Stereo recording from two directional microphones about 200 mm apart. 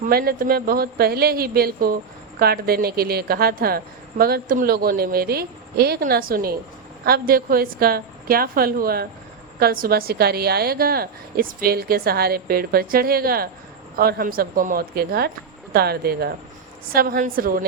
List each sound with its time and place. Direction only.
0.1 s a woman's voice: 50° right (ahead or behind)